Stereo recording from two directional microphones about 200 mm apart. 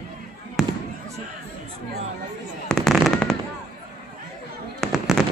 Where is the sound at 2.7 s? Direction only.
5° left (ahead or behind).